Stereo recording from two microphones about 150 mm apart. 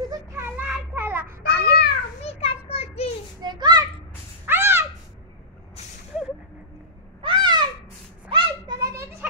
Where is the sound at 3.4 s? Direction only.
30° right (ahead or behind).